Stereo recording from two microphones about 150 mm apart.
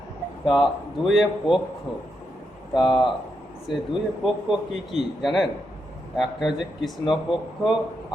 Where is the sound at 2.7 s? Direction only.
30° left (ahead or behind).